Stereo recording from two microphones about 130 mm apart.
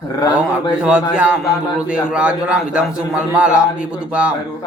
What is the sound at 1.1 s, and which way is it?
A man's voice, 5° right (ahead or behind).